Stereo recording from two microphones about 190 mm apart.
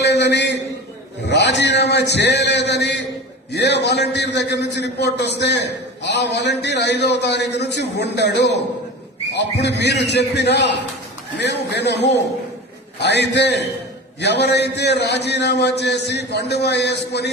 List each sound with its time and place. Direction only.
0.0 s a man's voice: 60° left (ahead or behind)
1.3 s a sound: 65° left (ahead or behind)
3.5 s a man's voice: 65° left (ahead or behind)